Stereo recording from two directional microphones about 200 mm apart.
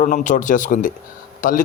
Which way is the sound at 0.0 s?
40° left (ahead or behind).